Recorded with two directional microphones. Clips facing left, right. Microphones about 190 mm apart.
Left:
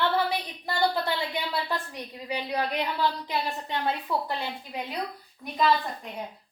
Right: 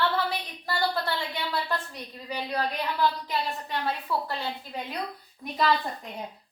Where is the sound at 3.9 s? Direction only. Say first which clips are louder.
Left 1 dB; 20° left (ahead or behind).